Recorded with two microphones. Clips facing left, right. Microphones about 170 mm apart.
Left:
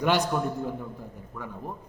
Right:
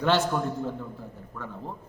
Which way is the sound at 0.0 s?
15° left (ahead or behind).